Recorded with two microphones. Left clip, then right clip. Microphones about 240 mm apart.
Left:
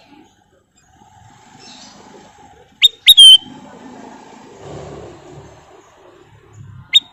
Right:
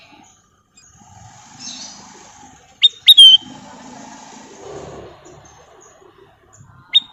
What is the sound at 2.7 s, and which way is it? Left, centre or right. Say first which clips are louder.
Bird: left 1 dB; centre.